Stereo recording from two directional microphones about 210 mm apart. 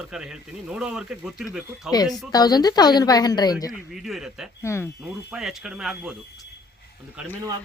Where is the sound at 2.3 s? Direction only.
20° left (ahead or behind).